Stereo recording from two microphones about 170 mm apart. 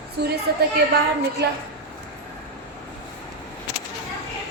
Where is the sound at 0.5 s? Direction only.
70° right (ahead or behind).